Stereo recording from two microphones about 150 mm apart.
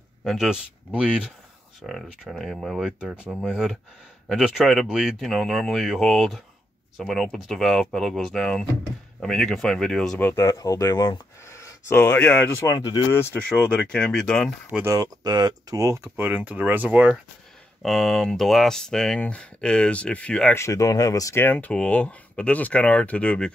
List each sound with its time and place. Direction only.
0.2 s speech: centre (ahead or behind)
10.2 s speech: 20° left (ahead or behind)
12.7 s speech: 30° left (ahead or behind)
13.1 s speech: 10° left (ahead or behind)
14.7 s speech: 10° right (ahead or behind)
15.0 s speech: 25° right (ahead or behind); by 17.2 s 10° right (ahead or behind)
17.8 s speech: centre (ahead or behind)
20.5 s speech: 20° left (ahead or behind)